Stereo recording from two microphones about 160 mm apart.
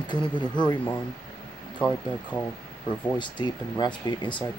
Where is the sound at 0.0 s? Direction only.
30° left (ahead or behind).